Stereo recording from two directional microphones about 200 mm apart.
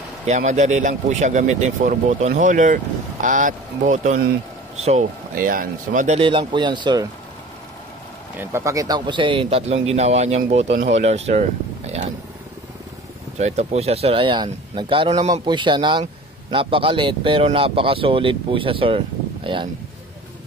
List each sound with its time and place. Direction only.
0.3 s speech: 35° right (ahead or behind)
8.4 s a man's voice: 15° right (ahead or behind); by 12.1 s 35° right (ahead or behind)
13.4 s speech: 35° right (ahead or behind)
15.4 s a man's voice: 25° right (ahead or behind)